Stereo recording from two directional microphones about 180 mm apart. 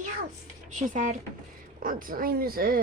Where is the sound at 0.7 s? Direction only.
45° right (ahead or behind).